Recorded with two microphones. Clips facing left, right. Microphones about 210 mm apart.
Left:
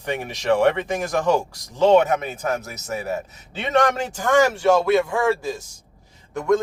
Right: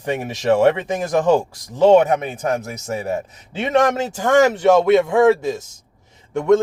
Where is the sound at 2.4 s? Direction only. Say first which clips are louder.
Right 4 dB; 30° right (ahead or behind).